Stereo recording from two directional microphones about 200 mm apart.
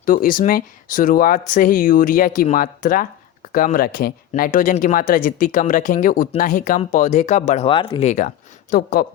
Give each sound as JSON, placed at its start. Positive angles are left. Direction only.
{"t": 0.0, "sound": "speech", "side_deg": 45}
{"t": 8.7, "sound": "speech", "side_deg": 50}